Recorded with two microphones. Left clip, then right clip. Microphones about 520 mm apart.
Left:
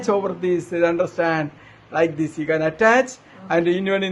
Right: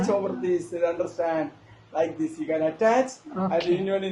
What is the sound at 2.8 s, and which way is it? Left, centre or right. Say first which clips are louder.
A man's voice: left 6 dB; left.